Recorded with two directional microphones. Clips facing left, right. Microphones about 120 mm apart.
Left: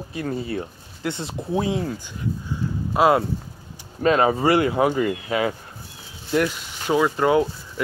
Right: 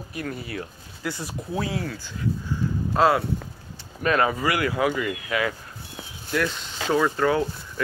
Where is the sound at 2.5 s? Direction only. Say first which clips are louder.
Left 1 dB; 15° left (ahead or behind).